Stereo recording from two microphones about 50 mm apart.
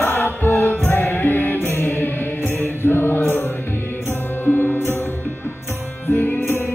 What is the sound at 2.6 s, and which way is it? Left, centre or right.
Mantra, left.